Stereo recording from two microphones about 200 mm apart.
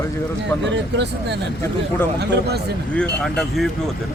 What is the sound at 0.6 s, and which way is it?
Speech, 60° right (ahead or behind).